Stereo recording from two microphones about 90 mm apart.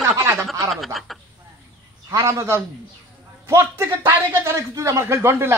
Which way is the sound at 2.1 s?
30° right (ahead or behind).